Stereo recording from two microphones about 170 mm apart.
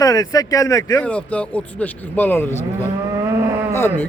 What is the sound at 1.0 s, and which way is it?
Speech, 10° left (ahead or behind).